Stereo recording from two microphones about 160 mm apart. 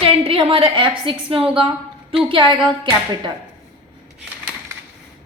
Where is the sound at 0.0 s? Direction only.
35° right (ahead or behind).